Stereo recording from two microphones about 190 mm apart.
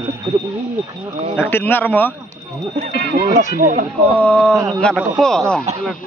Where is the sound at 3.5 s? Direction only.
50° right (ahead or behind).